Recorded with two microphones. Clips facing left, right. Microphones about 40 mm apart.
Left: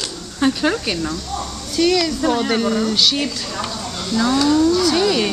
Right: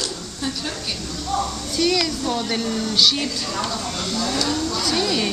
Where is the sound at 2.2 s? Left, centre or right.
Left.